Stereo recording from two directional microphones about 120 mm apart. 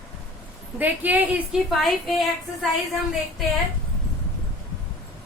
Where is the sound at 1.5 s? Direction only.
Centre (ahead or behind).